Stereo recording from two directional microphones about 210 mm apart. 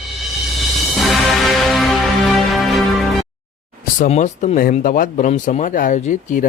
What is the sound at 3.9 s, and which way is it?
Speech, 35° left (ahead or behind).